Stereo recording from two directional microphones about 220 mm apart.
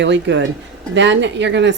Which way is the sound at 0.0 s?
55° right (ahead or behind).